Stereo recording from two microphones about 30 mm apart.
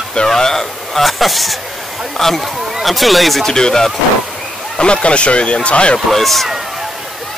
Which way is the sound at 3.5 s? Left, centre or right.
Centre.